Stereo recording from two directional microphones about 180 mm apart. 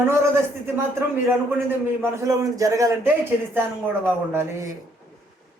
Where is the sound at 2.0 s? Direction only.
15° right (ahead or behind).